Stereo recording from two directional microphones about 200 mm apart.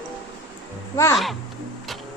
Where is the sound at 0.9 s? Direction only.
15° left (ahead or behind).